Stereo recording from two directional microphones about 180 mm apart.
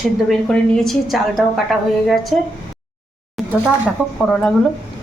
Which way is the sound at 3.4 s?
Centre (ahead or behind).